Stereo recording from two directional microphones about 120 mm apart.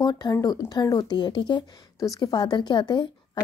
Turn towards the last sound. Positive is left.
turn(degrees=40)  # may be behind; listen again after turning